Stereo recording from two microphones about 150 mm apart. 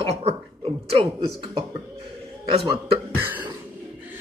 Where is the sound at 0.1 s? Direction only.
45° right (ahead or behind).